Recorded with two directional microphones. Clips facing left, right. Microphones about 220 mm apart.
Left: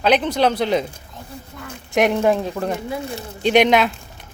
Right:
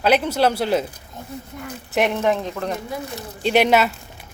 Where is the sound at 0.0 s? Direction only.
10° right (ahead or behind).